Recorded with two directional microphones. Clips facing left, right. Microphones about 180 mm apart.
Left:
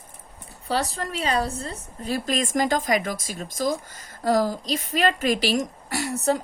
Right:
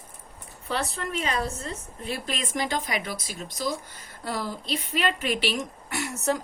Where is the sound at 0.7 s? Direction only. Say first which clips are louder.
Left 3 dB; 35° left (ahead or behind).